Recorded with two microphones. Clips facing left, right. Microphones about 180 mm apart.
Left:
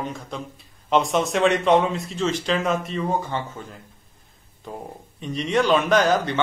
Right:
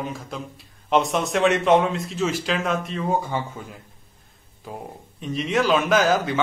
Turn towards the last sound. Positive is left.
turn(degrees=-5)  # may be behind; listen again after turning